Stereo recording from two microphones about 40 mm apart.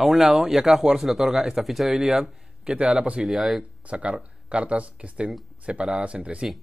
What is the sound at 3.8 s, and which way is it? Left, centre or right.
Speech, right.